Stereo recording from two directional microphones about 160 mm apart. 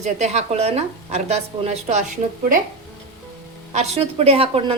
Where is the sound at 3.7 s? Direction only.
40° right (ahead or behind).